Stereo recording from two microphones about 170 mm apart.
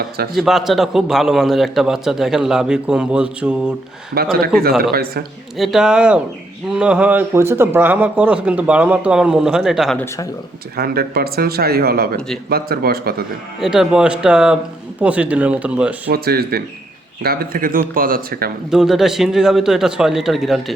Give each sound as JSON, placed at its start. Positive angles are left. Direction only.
{"t": 0.3, "sound": "a man's voice", "side_deg": 0}
{"t": 4.1, "sound": "speech", "side_deg": -65}
{"t": 5.5, "sound": "a man's voice", "side_deg": 0}
{"t": 10.8, "sound": "speech", "side_deg": -65}
{"t": 13.6, "sound": "a man's voice", "side_deg": -5}
{"t": 16.1, "sound": "speech", "side_deg": -65}
{"t": 18.7, "sound": "a man's voice", "side_deg": 0}